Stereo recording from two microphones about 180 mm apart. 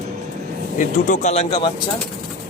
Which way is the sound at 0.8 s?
45° left (ahead or behind).